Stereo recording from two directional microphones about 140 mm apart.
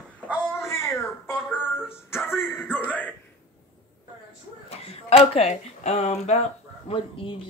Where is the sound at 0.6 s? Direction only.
20° left (ahead or behind).